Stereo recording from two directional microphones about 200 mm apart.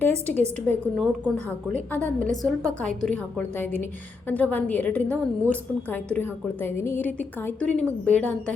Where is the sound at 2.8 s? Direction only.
5° left (ahead or behind).